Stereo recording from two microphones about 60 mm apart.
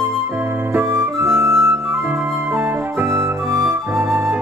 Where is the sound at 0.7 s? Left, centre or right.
Right.